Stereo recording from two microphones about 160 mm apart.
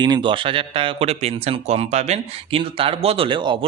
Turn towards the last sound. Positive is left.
turn(degrees=-30)  # may be behind; listen again after turning